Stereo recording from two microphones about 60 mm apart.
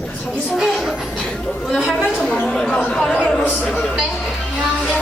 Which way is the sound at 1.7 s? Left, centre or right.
Centre.